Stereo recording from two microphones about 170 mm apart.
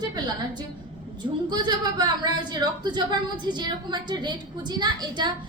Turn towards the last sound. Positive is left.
turn(degrees=-25)  # may be behind; listen again after turning